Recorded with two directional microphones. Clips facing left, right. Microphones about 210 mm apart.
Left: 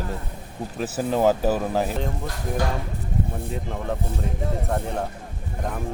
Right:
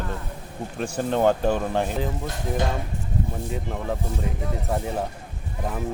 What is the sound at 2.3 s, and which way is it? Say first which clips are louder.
Speech: even; 25° right (ahead or behind).